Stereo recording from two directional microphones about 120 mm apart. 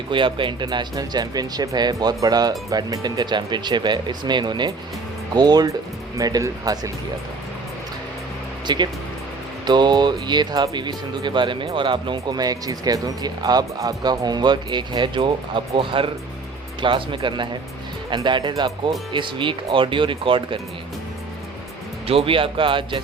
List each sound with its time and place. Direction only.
0.1 s speech: 45° right (ahead or behind)
8.6 s speech: 40° right (ahead or behind)
22.0 s speech: 50° right (ahead or behind)